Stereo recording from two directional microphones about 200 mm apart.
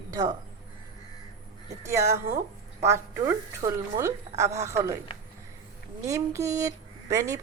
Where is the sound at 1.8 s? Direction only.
15° right (ahead or behind).